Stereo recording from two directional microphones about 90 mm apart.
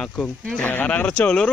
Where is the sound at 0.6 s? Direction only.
15° left (ahead or behind).